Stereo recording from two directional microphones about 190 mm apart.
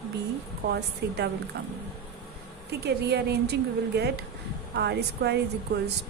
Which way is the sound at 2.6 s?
60° right (ahead or behind).